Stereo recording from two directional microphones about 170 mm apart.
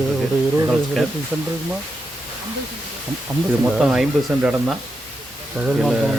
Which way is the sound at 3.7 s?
Centre (ahead or behind).